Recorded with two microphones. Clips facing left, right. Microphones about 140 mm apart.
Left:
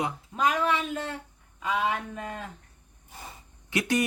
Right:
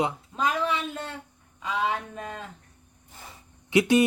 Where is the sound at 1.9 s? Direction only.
25° right (ahead or behind).